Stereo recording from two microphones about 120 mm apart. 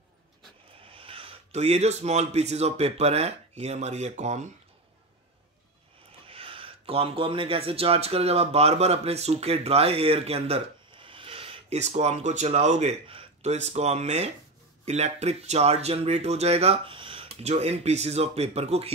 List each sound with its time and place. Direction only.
0.8 s speech: 50° right (ahead or behind); by 4.5 s 75° right (ahead or behind)
6.2 s speech: 50° right (ahead or behind)
11.7 s speech: 70° right (ahead or behind); by 17.3 s 45° right (ahead or behind)
17.4 s speech: 65° right (ahead or behind)